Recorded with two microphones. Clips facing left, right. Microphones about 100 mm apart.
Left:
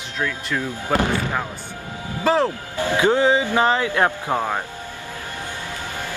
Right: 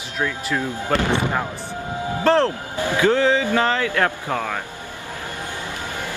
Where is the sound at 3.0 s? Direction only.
20° left (ahead or behind).